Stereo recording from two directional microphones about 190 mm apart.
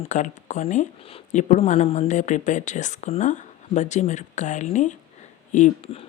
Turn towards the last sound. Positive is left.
turn(degrees=40)  # may be behind; listen again after turning